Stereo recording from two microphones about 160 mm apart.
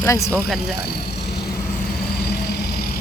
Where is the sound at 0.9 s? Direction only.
90° left.